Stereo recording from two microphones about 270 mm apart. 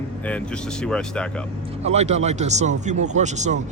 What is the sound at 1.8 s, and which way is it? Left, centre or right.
Speech, right.